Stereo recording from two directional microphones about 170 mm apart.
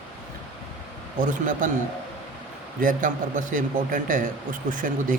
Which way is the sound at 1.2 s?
50° right (ahead or behind).